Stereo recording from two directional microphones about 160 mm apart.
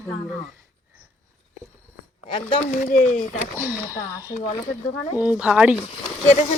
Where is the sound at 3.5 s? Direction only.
15° right (ahead or behind).